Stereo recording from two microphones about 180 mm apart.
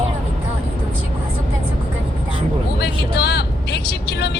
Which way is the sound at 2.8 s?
65° left (ahead or behind).